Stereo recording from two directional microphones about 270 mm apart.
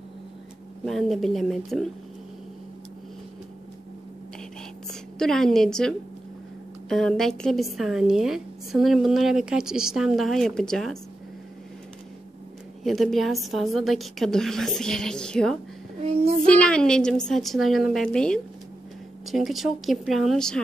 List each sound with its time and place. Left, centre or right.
0.8 s a woman's voice: centre
5.2 s a woman's voice: centre
12.8 s a woman's voice: centre
16.0 s child singing: right
16.4 s a woman's voice: centre